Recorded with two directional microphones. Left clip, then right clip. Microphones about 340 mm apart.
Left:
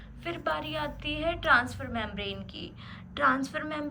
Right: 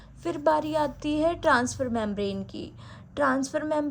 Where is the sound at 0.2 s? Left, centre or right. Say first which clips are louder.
Right 8 dB; centre.